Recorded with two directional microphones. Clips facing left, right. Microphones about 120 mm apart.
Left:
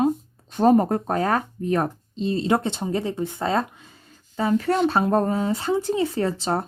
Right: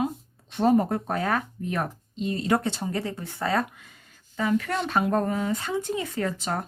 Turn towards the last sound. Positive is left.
turn(degrees=30)  # may be behind; listen again after turning